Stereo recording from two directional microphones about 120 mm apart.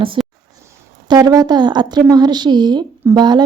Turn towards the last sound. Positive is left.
turn(degrees=-35)  # may be behind; listen again after turning